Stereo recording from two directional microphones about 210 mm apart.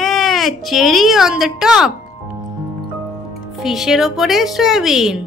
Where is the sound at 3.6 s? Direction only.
Centre (ahead or behind).